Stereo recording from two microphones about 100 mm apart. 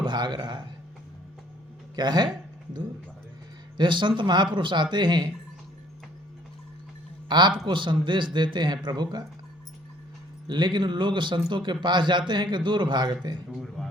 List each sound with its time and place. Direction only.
0.0 s a man's voice: 50° right (ahead or behind)
2.0 s speech: 45° right (ahead or behind)
3.8 s speech: 50° right (ahead or behind)
7.3 s a man's voice: 50° right (ahead or behind)
10.4 s speech: 50° right (ahead or behind)
13.8 s a sound: centre (ahead or behind)